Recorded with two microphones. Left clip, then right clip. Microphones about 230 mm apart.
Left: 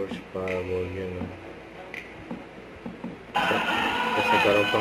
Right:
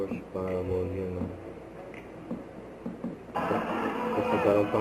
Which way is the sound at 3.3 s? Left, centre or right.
Left.